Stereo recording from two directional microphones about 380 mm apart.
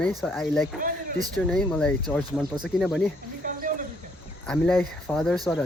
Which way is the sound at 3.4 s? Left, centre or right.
Right.